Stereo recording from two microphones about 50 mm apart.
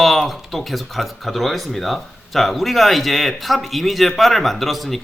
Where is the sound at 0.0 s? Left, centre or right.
Centre.